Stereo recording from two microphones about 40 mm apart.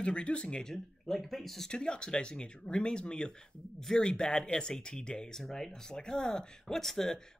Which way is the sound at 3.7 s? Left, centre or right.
Centre.